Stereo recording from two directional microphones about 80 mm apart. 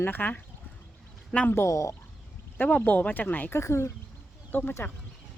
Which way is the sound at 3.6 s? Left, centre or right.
Left.